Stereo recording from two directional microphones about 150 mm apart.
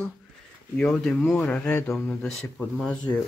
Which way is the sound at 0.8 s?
5° left (ahead or behind).